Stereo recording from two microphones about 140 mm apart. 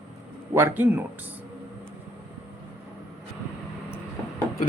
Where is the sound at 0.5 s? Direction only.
15° right (ahead or behind).